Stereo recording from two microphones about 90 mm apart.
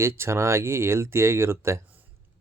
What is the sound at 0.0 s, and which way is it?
Speech, 30° right (ahead or behind).